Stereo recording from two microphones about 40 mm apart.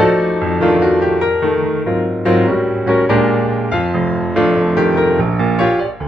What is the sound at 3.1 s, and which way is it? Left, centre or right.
Music, centre.